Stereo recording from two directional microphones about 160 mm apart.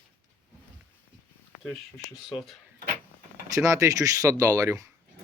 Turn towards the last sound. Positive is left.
turn(degrees=-20)  # may be behind; listen again after turning